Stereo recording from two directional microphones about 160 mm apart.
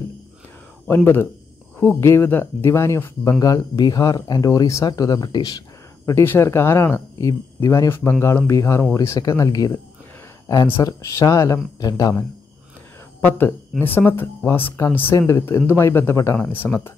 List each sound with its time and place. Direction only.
0.8 s speech: 15° left (ahead or behind)
16.6 s speech: 5° left (ahead or behind)